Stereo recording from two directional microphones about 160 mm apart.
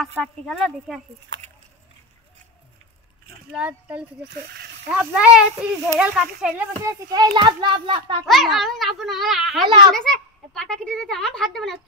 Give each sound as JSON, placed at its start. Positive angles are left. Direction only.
{"t": 0.2, "sound": "a child's voice", "side_deg": 5}
{"t": 3.5, "sound": "a child's voice", "side_deg": -10}
{"t": 6.8, "sound": "a child's voice", "side_deg": -20}
{"t": 8.3, "sound": "a child's voice", "side_deg": 0}
{"t": 9.7, "sound": "a child's voice", "side_deg": -30}
{"t": 9.9, "sound": "a child's voice", "side_deg": 5}